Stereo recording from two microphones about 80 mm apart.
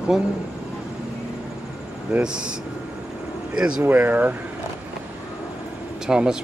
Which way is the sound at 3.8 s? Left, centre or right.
Right.